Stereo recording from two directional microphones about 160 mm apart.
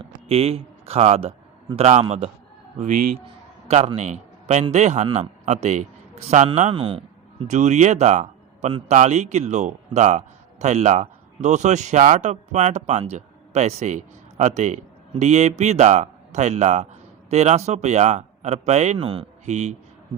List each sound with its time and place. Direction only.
0.0 s a man's voice: 40° right (ahead or behind)
3.7 s a man's voice: 45° right (ahead or behind)